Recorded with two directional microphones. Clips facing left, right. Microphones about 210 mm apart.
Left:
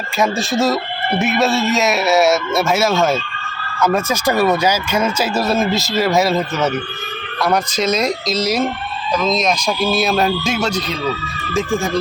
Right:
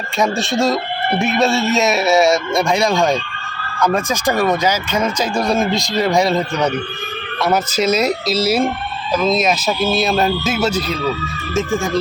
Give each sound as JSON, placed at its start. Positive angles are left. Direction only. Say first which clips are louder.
{"t": 0.2, "sound": "a man's voice", "louder": "even", "side_deg": 0}